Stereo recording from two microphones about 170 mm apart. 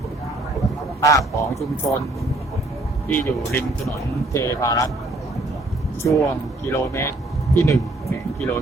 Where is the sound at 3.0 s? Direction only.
15° left (ahead or behind).